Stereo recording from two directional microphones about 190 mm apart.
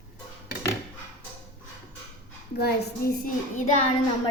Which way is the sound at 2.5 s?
55° left (ahead or behind).